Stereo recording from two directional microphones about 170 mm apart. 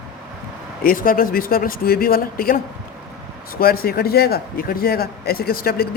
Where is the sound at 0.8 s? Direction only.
55° left (ahead or behind).